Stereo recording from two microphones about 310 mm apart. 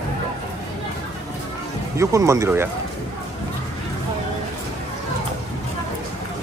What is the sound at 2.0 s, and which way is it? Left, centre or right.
Speech, centre.